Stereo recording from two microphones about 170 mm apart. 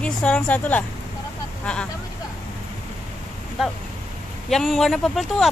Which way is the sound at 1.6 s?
5° left (ahead or behind).